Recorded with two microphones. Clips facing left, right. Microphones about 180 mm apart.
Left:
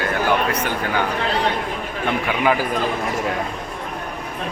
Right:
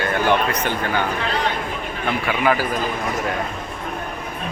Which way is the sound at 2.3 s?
15° left (ahead or behind).